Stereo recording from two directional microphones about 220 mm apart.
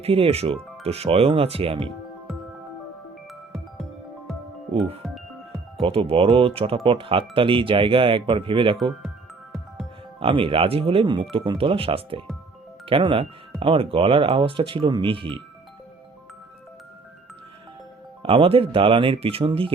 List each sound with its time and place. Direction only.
0.0 s speech: 25° right (ahead or behind)
5.0 s music: centre (ahead or behind)
5.8 s speech: 25° right (ahead or behind)
8.8 s music: centre (ahead or behind)
10.2 s speech: 25° right (ahead or behind)
18.2 s speech: 25° right (ahead or behind)